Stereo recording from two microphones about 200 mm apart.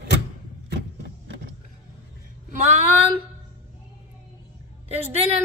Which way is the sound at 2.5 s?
35° right (ahead or behind).